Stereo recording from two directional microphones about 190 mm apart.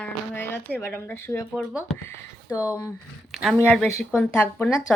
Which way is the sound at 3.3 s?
Centre (ahead or behind).